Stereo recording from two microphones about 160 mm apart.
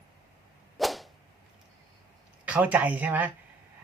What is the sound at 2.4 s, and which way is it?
Speech, 10° right (ahead or behind).